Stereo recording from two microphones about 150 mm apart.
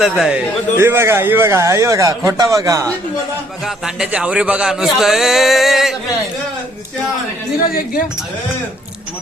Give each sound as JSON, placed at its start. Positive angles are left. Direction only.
{"t": 0.0, "sound": "a man's voice", "side_deg": -5}
{"t": 0.8, "sound": "a man's voice", "side_deg": -15}
{"t": 3.8, "sound": "a man's voice", "side_deg": -5}
{"t": 7.7, "sound": "speech", "side_deg": 75}